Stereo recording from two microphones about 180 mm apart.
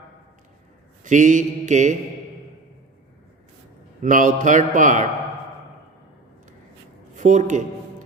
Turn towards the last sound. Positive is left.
turn(degrees=-45)  # may be behind; listen again after turning